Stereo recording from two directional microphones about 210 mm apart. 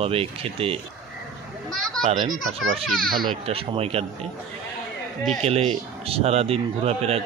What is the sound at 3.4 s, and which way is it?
Speech, 30° right (ahead or behind).